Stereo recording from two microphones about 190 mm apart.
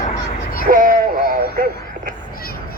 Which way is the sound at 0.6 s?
45° right (ahead or behind).